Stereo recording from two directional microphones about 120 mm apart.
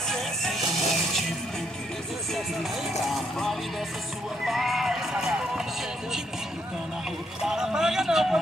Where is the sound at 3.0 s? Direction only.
Centre (ahead or behind).